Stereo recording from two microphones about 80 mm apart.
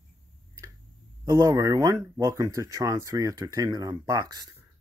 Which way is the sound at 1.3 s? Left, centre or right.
Right.